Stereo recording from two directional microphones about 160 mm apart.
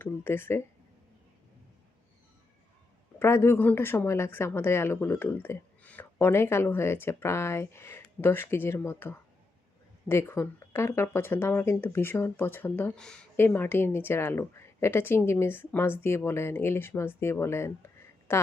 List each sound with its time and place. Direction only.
0.0 s speech: 15° left (ahead or behind)
3.2 s a woman's voice: 15° left (ahead or behind)